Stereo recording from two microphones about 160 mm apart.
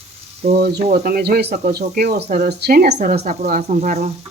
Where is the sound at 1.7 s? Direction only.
75° right (ahead or behind); by 4.1 s 45° right (ahead or behind).